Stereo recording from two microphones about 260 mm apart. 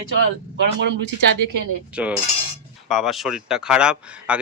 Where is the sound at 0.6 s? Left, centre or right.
Right.